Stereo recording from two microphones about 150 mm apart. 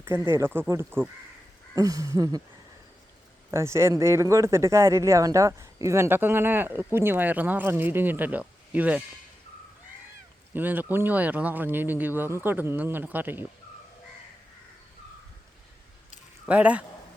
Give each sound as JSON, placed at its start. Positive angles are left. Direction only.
{"t": 0.0, "sound": "speech", "side_deg": -15}
{"t": 3.5, "sound": "speech", "side_deg": -20}
{"t": 10.5, "sound": "speech", "side_deg": -10}
{"t": 16.5, "sound": "speech", "side_deg": -10}